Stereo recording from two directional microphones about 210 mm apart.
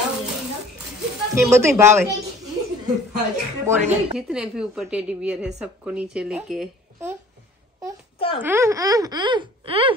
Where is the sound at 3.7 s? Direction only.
15° right (ahead or behind).